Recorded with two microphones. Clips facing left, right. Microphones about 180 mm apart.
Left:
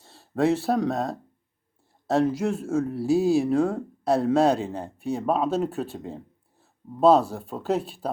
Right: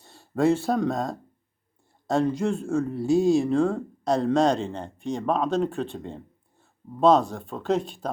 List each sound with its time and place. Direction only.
0.0 s speech: centre (ahead or behind)